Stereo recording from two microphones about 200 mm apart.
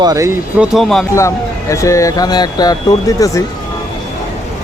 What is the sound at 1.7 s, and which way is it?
Speech, 15° left (ahead or behind).